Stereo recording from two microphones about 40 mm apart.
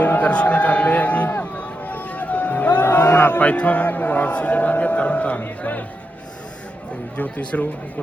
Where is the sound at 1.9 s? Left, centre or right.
Left.